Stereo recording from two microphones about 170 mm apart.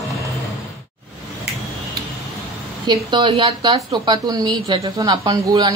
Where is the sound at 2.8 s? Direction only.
25° right (ahead or behind).